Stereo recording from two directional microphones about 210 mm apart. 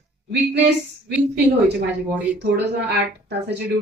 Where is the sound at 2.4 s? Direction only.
55° right (ahead or behind).